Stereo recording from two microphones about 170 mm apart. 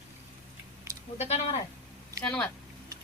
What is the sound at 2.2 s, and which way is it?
Speech, 5° left (ahead or behind).